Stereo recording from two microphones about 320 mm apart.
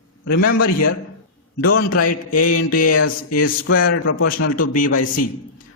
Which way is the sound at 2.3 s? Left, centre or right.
Left.